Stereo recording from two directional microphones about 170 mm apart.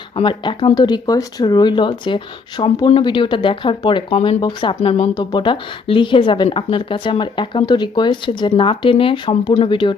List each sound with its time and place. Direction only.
0.2 s speech: 30° left (ahead or behind)